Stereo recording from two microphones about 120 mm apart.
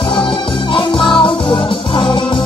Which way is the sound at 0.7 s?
45° left (ahead or behind).